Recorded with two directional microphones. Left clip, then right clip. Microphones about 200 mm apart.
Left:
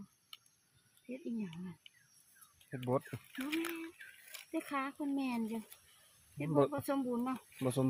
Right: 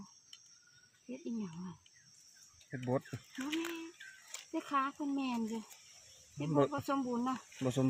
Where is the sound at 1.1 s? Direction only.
Centre (ahead or behind).